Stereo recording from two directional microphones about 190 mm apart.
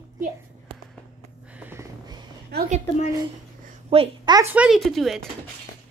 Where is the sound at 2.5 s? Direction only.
55° right (ahead or behind).